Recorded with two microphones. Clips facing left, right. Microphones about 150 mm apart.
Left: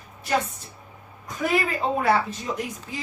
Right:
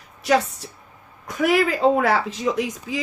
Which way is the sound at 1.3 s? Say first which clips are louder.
Right 5 dB; 75° right (ahead or behind).